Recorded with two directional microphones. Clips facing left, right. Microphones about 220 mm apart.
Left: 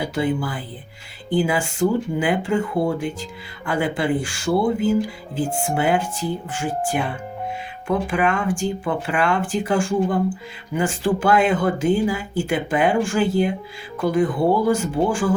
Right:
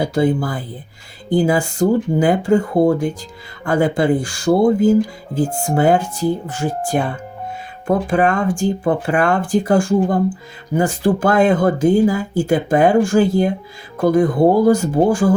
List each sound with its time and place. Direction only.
0.0 s speech: 40° right (ahead or behind)